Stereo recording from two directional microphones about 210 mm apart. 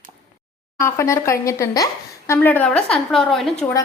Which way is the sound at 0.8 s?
15° left (ahead or behind).